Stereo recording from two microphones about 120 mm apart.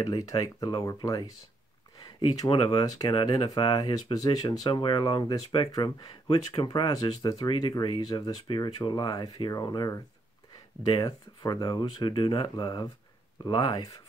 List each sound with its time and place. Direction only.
0.0 s speech: 30° left (ahead or behind)
2.2 s speech: 35° left (ahead or behind)
6.9 s speech: 30° left (ahead or behind)
11.1 s speech: 35° left (ahead or behind)
11.8 s speech: 50° left (ahead or behind); by 13.7 s 35° left (ahead or behind)